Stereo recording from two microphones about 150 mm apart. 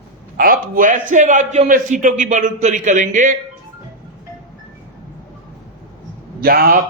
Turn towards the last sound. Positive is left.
turn(degrees=-90)